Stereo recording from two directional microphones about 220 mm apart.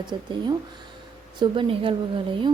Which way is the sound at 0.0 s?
20° right (ahead or behind).